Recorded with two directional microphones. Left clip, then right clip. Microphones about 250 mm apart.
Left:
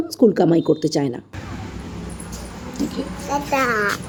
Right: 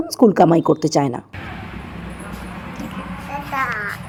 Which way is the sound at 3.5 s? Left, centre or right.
Left.